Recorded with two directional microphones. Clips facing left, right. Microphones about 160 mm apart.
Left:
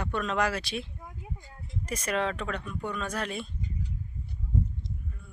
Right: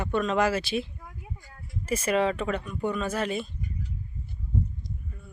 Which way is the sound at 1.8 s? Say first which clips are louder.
Right 5 dB; 5° right (ahead or behind).